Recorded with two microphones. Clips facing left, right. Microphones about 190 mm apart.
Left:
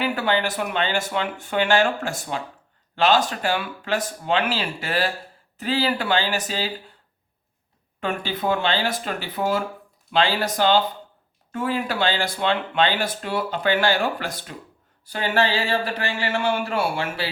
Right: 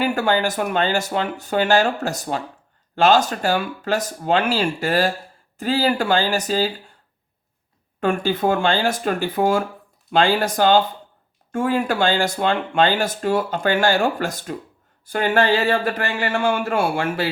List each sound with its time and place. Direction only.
0.0 s speech: 45° right (ahead or behind)
8.0 s speech: 45° right (ahead or behind)